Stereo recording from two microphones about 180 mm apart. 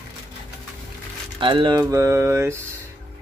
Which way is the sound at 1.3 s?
25° right (ahead or behind).